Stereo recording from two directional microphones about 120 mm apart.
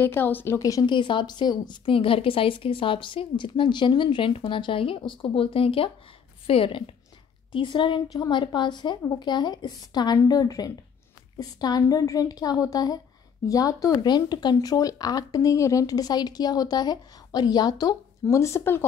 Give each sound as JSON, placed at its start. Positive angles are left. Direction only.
{"t": 0.0, "sound": "speech", "side_deg": 15}
{"t": 0.6, "sound": "speech", "side_deg": 30}
{"t": 0.9, "sound": "a woman's voice", "side_deg": 40}